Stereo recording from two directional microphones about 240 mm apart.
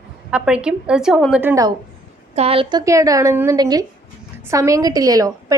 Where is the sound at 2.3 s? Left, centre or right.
Right.